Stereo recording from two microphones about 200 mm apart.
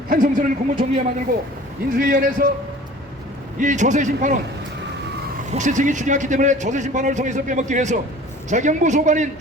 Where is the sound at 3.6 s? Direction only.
40° right (ahead or behind).